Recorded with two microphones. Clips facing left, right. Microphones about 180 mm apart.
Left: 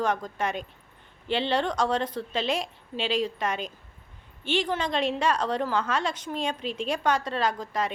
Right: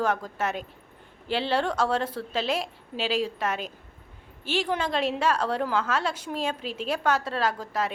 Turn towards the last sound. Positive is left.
turn(degrees=-5)  # may be behind; listen again after turning